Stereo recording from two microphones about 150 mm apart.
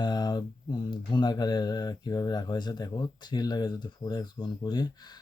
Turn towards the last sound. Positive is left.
turn(degrees=30)  # may be behind; listen again after turning